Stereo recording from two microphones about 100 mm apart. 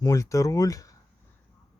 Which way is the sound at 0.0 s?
35° left (ahead or behind).